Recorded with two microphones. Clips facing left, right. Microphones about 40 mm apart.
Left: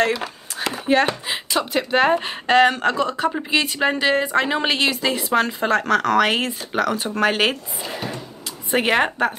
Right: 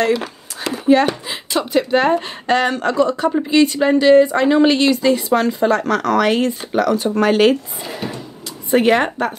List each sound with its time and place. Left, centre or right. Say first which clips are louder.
0.6 s a sound: right 5 dB; left
1.5 s a woman's voice: right 5 dB; centre
7.8 s speech: right 2 dB; centre
8.6 s a woman's voice: right 4 dB; centre